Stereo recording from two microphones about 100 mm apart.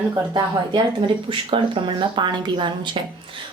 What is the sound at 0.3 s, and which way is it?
Speech, 55° right (ahead or behind).